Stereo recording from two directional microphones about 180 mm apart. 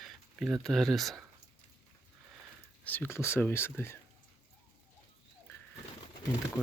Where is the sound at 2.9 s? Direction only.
10° left (ahead or behind).